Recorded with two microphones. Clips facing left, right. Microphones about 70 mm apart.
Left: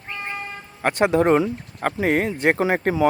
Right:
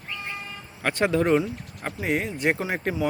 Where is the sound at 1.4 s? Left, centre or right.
Left.